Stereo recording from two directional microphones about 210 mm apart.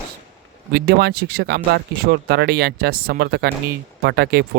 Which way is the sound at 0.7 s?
50° right (ahead or behind).